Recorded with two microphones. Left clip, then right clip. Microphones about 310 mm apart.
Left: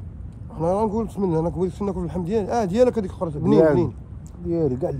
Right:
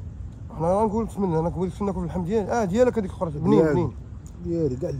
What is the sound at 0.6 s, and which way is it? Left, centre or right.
Speech, centre.